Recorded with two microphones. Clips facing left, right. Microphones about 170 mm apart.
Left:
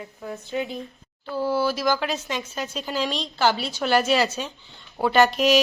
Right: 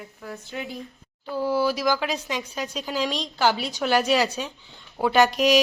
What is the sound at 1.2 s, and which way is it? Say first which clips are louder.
Speech: even; 15° right (ahead or behind).